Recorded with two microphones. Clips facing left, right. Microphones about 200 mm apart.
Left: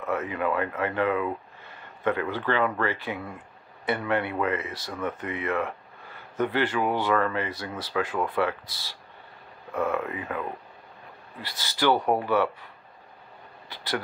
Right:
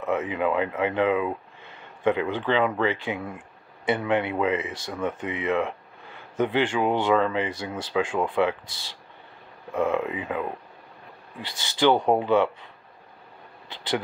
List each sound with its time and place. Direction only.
0.0 s speech: 20° right (ahead or behind)
9.8 s speech: 20° right (ahead or behind)
11.8 s speech: 15° right (ahead or behind)